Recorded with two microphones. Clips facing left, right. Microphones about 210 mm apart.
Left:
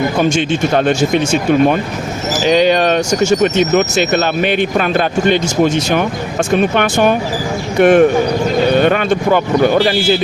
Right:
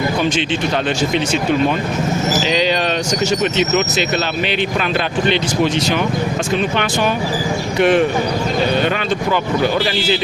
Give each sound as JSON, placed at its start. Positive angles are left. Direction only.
{"t": 0.2, "sound": "speech", "side_deg": 45}